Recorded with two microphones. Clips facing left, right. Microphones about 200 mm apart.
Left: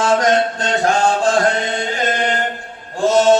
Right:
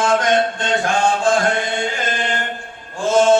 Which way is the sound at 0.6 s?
40° left (ahead or behind).